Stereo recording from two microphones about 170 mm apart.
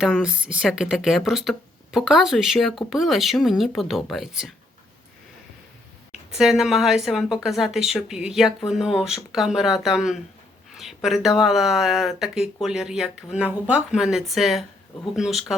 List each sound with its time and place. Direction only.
0.0 s speech: 5° right (ahead or behind)
6.1 s a woman's voice: 5° right (ahead or behind)